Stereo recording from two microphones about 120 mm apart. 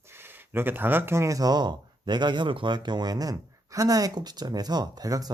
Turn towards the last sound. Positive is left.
turn(degrees=-30)  # may be behind; listen again after turning